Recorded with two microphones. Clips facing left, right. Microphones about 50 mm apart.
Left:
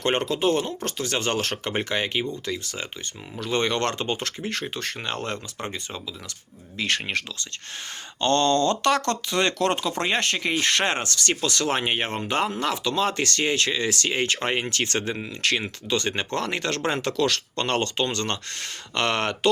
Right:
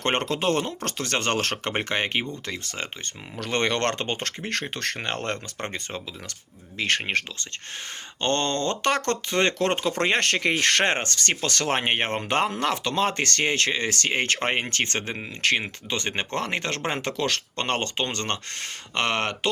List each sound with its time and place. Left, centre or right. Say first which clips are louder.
0.0 s speech: left 2 dB; right